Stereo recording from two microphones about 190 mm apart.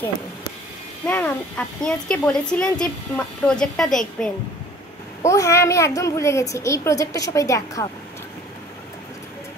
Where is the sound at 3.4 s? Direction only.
5° left (ahead or behind).